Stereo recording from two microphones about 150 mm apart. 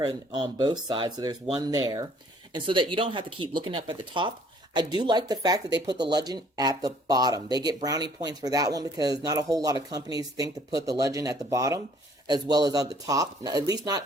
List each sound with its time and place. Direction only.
0.0 s speech: 30° right (ahead or behind)